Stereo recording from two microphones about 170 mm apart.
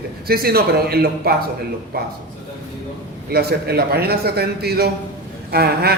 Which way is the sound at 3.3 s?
70° right (ahead or behind).